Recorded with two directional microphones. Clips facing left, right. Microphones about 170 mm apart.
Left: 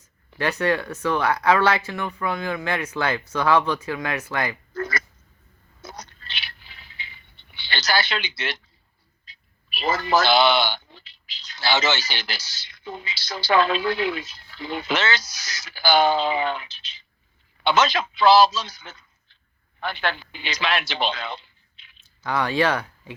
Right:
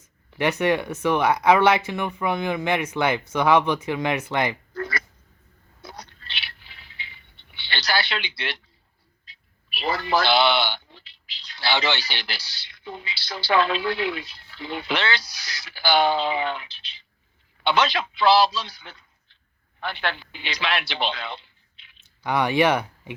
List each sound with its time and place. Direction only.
0.3 s speech: 20° right (ahead or behind)
4.7 s a sound: 45° left (ahead or behind)
5.8 s scrape: 45° left (ahead or behind)
9.2 s a man's voice: 40° left (ahead or behind)
22.2 s speech: 15° right (ahead or behind)